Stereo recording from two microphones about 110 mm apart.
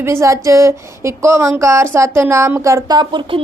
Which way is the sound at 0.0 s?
25° right (ahead or behind).